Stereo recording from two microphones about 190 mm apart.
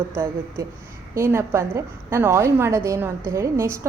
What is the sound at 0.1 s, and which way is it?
A woman's voice, 15° right (ahead or behind).